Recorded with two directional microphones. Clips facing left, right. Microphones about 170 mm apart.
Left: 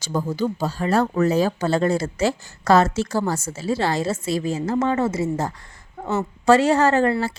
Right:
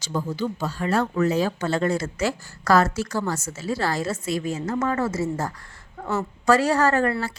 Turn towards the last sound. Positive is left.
turn(degrees=25)  # may be behind; listen again after turning